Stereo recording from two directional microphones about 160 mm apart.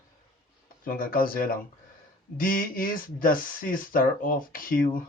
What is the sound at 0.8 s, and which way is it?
Speech, 65° left (ahead or behind).